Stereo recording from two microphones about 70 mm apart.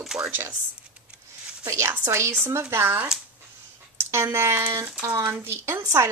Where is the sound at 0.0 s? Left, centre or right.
Centre.